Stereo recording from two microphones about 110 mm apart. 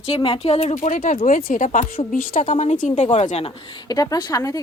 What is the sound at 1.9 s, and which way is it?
A woman's voice, 90° left.